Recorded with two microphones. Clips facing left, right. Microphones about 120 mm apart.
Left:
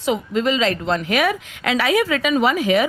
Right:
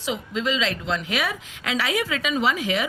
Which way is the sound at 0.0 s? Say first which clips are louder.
Left 7 dB; 50° left (ahead or behind).